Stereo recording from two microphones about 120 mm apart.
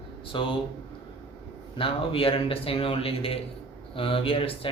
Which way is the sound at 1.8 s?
50° left (ahead or behind).